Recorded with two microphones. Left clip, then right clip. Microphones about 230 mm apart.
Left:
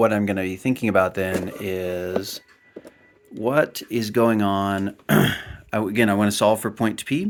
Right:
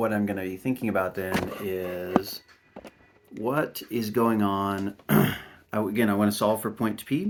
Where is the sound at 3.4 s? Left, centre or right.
Left.